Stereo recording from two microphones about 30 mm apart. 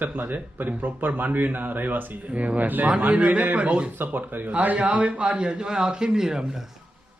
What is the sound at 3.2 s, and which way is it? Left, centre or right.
Speech, right.